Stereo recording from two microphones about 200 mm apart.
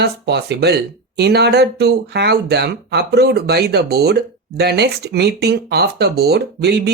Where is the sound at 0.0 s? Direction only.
55° right (ahead or behind).